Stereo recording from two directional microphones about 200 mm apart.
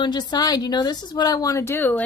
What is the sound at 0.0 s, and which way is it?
A woman's voice, 20° left (ahead or behind).